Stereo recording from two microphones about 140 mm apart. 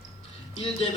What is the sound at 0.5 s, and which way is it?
Speech, 45° left (ahead or behind).